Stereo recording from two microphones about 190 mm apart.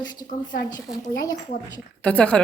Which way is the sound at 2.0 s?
5° left (ahead or behind).